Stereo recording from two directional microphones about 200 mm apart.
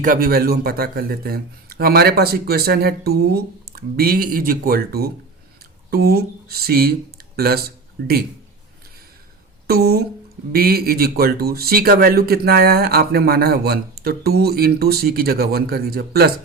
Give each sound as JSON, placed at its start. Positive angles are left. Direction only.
{"t": 0.0, "sound": "speech", "side_deg": -45}
{"t": 9.6, "sound": "speech", "side_deg": -50}